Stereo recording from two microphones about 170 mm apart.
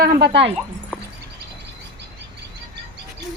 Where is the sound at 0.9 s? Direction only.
10° right (ahead or behind).